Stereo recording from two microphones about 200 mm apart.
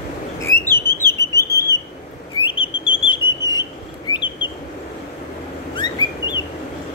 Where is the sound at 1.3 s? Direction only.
15° left (ahead or behind).